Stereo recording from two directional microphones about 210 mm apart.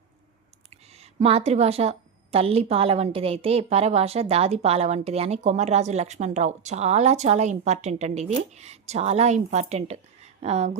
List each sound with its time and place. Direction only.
0.9 s a woman's voice: 30° right (ahead or behind)